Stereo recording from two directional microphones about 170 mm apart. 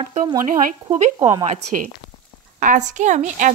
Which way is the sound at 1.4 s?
50° right (ahead or behind).